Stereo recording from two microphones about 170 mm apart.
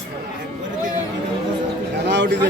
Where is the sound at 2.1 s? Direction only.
90° right.